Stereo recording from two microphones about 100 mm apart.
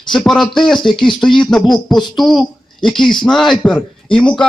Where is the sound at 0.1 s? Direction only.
5° left (ahead or behind).